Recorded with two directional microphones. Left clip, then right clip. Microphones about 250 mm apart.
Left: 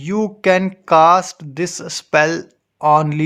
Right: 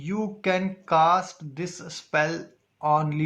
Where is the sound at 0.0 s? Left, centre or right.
Left.